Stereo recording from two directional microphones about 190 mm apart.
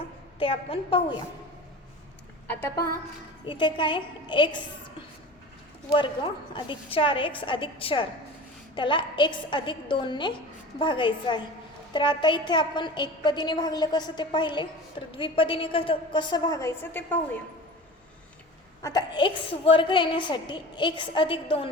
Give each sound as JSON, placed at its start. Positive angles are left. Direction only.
{"t": 0.3, "sound": "a woman's voice", "side_deg": 30}
{"t": 2.5, "sound": "a woman's voice", "side_deg": 10}
{"t": 3.4, "sound": "a woman's voice", "side_deg": 25}
{"t": 6.0, "sound": "a woman's voice", "side_deg": 25}
{"t": 18.8, "sound": "a woman's voice", "side_deg": 20}